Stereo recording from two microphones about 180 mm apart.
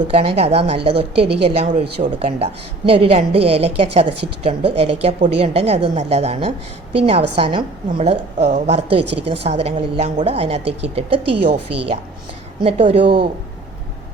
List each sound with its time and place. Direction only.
0.1 s a woman's voice: 30° right (ahead or behind)